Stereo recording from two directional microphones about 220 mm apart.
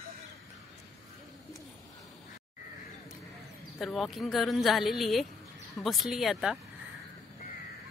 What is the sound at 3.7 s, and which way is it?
A woman's voice, centre (ahead or behind).